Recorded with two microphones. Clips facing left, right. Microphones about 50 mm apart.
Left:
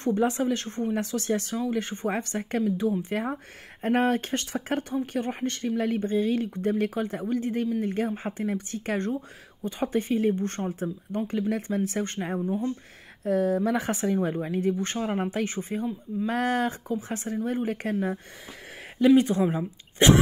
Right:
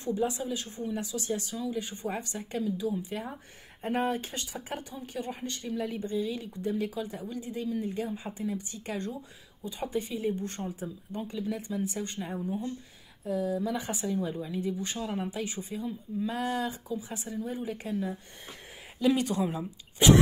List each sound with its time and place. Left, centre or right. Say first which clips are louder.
0.2 s speech: left 6 dB; left
0.9 s speech: left 4 dB; left
3.8 s speech: left 6 dB; left
16.3 s speech: left 6 dB; left
18.9 s speech: left 7 dB; left